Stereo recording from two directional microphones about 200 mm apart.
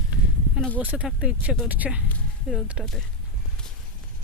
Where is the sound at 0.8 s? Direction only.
5° right (ahead or behind).